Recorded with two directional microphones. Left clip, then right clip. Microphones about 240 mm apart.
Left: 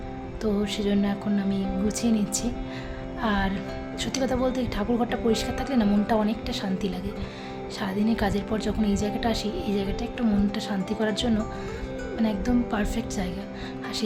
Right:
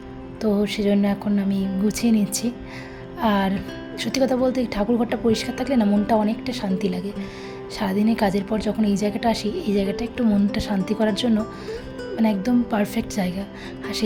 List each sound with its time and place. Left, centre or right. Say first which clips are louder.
0.4 s a woman's voice: right 5 dB; centre